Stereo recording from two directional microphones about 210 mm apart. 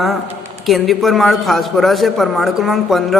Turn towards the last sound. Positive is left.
turn(degrees=0)  # may be behind; listen again after turning